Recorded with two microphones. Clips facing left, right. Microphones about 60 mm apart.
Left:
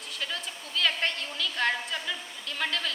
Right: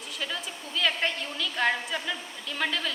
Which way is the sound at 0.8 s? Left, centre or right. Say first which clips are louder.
Right 1 dB; centre.